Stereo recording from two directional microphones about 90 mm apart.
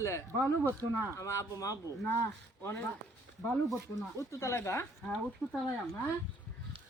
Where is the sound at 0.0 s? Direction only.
30° left (ahead or behind).